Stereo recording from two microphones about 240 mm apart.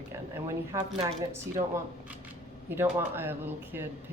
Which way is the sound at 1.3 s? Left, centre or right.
Centre.